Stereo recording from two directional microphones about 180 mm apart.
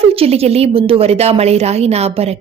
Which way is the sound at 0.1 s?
35° right (ahead or behind).